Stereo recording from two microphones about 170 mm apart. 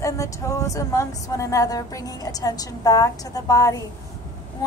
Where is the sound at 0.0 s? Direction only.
20° left (ahead or behind).